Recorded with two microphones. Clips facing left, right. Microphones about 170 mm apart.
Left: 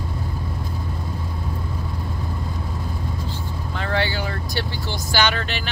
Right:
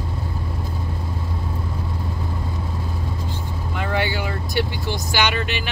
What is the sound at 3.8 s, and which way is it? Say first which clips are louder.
Vehicle: even; 15° right (ahead or behind).